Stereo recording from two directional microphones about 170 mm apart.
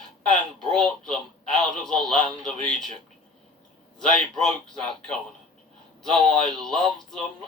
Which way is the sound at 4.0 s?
5° left (ahead or behind).